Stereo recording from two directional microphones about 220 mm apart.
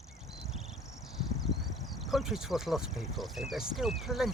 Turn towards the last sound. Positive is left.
turn(degrees=0)  # may be behind; listen again after turning